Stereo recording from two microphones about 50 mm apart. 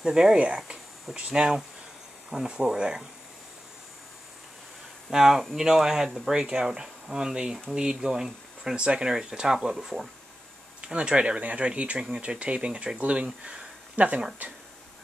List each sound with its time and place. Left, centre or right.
0.0 s speech: centre
5.1 s speech: centre; by 14.2 s right